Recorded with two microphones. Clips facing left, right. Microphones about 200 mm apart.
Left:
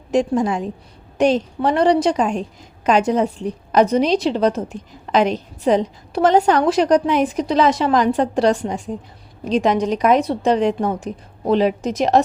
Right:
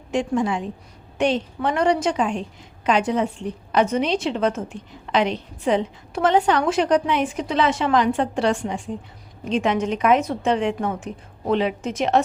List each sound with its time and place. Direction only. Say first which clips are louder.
0.1 s a woman's voice: left 4 dB; 40° left (ahead or behind)